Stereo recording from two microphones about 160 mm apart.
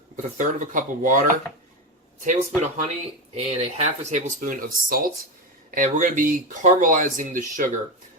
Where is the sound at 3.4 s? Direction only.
45° right (ahead or behind).